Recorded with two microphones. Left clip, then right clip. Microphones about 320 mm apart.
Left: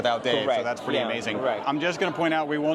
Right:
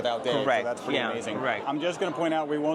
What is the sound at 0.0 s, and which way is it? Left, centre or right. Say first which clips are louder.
Speech: left 3 dB; left.